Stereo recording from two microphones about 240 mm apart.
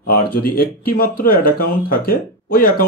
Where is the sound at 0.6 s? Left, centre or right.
Left.